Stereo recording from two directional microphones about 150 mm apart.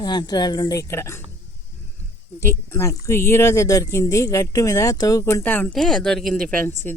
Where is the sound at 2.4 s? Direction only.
15° left (ahead or behind).